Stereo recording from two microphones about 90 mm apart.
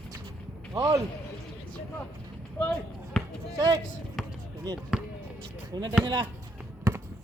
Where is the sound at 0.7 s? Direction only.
50° right (ahead or behind).